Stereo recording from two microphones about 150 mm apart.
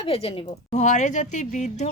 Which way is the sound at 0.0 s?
40° left (ahead or behind).